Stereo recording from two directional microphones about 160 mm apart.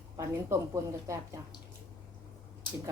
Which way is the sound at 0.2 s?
20° right (ahead or behind).